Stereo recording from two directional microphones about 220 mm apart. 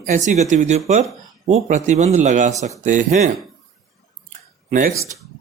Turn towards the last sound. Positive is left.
turn(degrees=-35)  # may be behind; listen again after turning